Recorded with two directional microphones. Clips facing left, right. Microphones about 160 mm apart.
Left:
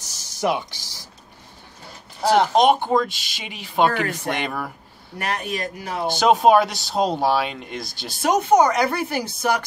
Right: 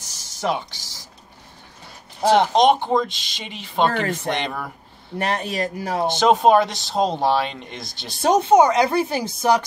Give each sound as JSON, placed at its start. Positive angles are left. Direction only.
{"t": 0.3, "sound": "speech", "side_deg": 10}
{"t": 2.5, "sound": "speech", "side_deg": 5}
{"t": 5.2, "sound": "speech", "side_deg": -30}
{"t": 6.1, "sound": "speech", "side_deg": 5}
{"t": 8.2, "sound": "a woman's voice", "side_deg": -25}